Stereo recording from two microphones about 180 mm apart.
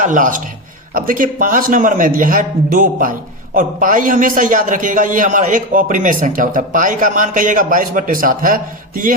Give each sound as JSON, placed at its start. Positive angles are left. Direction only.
{"t": 0.0, "sound": "a man's voice", "side_deg": -45}